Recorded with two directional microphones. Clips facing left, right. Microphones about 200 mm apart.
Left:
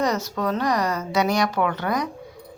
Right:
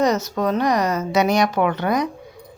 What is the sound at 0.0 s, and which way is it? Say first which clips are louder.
A woman's voice: right 4 dB; 20° right (ahead or behind).